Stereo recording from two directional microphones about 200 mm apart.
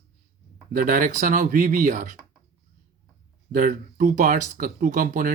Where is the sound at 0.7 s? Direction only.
40° right (ahead or behind).